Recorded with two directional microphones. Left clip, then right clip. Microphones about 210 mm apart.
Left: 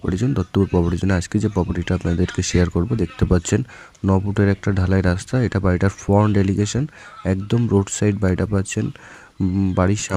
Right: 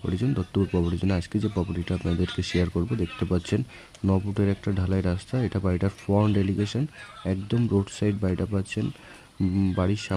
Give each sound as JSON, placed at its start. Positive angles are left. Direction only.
{"t": 0.0, "sound": "speech", "side_deg": 20}